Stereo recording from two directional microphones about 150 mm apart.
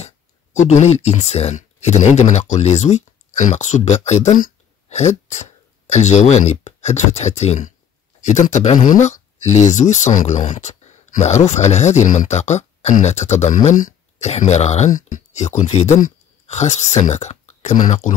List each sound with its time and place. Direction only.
0.0 s speech: 50° left (ahead or behind)